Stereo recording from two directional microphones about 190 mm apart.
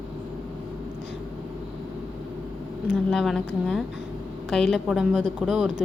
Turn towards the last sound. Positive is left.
turn(degrees=-5)  # may be behind; listen again after turning